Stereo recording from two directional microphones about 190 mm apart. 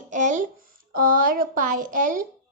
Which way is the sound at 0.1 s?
40° right (ahead or behind).